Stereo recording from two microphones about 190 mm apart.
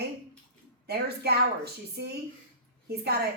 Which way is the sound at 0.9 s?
55° right (ahead or behind).